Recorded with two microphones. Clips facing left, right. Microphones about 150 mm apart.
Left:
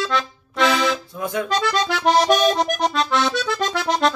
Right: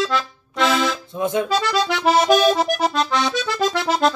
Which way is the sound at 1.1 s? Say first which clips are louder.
Right 4 dB; 25° right (ahead or behind).